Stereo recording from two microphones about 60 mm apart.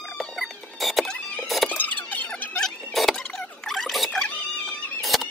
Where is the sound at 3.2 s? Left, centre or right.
Centre.